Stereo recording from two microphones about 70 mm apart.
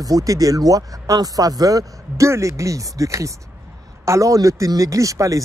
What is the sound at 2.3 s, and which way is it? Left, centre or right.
Speech, right.